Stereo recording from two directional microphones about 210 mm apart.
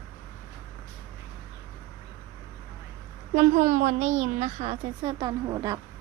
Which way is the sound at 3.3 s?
35° right (ahead or behind).